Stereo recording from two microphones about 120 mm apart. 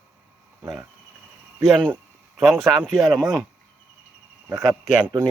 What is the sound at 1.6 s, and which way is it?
Speech, centre (ahead or behind).